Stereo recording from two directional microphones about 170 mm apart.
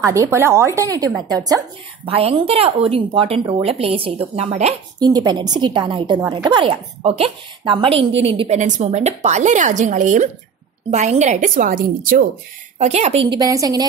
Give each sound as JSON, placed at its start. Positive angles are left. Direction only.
{"t": 0.0, "sound": "a woman's voice", "side_deg": -15}
{"t": 2.0, "sound": "speech", "side_deg": -35}
{"t": 4.9, "sound": "a woman's voice", "side_deg": -25}
{"t": 8.5, "sound": "a woman's voice", "side_deg": -45}
{"t": 12.7, "sound": "a woman's voice", "side_deg": -40}